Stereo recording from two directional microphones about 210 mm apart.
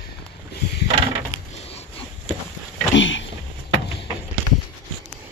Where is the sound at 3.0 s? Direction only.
65° left (ahead or behind).